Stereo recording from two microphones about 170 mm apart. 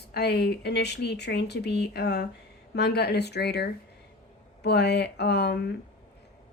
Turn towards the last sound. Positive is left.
turn(degrees=70)  # may be behind; listen again after turning